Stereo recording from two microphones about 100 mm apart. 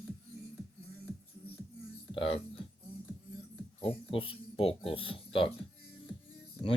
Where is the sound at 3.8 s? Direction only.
65° left (ahead or behind).